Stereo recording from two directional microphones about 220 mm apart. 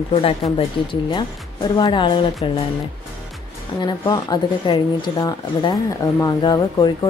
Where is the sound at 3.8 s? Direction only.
20° left (ahead or behind).